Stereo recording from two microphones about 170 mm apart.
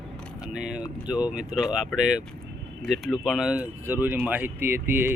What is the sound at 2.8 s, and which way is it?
Speech, centre (ahead or behind).